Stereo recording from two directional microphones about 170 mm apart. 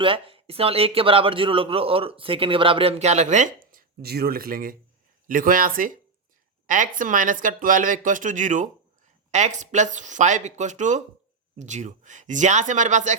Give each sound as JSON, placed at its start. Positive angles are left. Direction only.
{"t": 0.0, "sound": "speech", "side_deg": -30}